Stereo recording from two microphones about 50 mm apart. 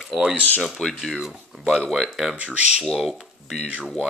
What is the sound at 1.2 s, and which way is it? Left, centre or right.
Speech, centre.